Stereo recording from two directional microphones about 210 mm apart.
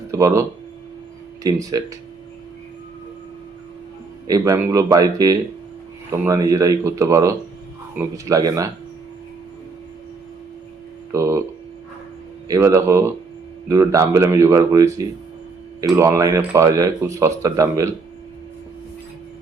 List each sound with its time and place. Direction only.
0.1 s speech: 15° right (ahead or behind)
1.5 s speech: 15° right (ahead or behind)
4.3 s speech: 15° right (ahead or behind)
11.1 s speech: 15° right (ahead or behind)
12.5 s speech: 15° right (ahead or behind)